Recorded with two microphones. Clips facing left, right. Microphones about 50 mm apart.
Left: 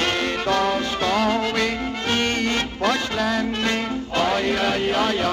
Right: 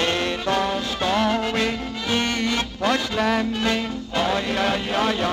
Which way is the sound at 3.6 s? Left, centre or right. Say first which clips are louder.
Even; left.